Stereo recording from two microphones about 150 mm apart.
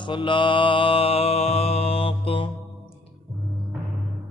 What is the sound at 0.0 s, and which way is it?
Mantra, 35° left (ahead or behind).